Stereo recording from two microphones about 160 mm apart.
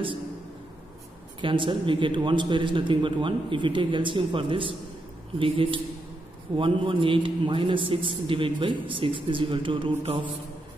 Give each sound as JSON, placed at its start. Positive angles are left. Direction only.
{"t": 1.4, "sound": "a man's voice", "side_deg": -30}